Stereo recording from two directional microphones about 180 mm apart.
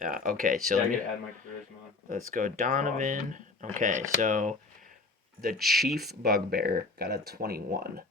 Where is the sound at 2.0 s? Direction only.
50° right (ahead or behind).